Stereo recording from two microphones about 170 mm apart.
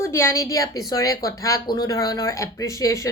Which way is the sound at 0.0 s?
15° left (ahead or behind).